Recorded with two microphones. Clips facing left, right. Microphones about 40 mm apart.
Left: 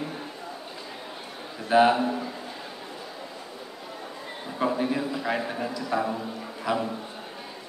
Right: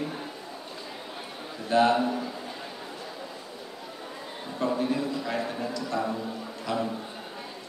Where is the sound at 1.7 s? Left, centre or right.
Centre.